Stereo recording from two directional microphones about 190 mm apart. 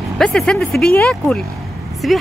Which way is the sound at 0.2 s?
5° left (ahead or behind).